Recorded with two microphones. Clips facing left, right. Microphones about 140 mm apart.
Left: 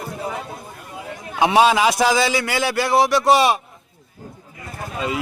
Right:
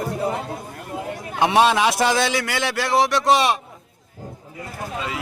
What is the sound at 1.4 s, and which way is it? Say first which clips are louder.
A man's voice: left 2 dB; centre (ahead or behind).